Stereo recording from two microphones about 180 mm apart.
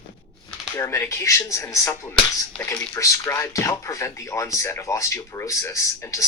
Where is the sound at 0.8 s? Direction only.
15° left (ahead or behind).